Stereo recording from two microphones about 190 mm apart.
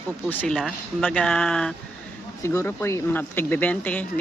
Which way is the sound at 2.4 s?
15° left (ahead or behind).